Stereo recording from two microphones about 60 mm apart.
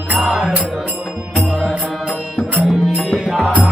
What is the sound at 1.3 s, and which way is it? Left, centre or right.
Music, centre.